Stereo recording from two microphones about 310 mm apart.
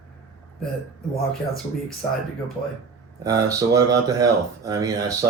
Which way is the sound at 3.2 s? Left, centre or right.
Centre.